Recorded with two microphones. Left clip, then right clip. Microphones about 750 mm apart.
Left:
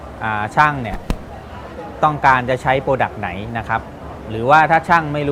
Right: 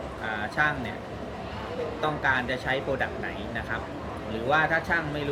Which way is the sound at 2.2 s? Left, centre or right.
Left.